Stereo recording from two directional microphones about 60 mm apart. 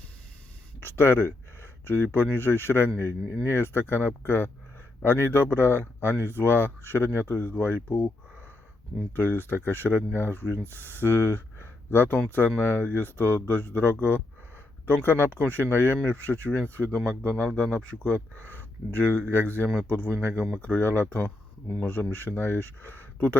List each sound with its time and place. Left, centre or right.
0.8 s speech: left
6.1 s speech: right
6.4 s speech: left
9.1 s speech: left